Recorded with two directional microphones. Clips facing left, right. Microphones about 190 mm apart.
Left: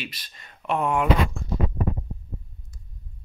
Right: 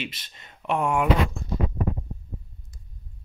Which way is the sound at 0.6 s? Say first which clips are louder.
Even; 10° right (ahead or behind).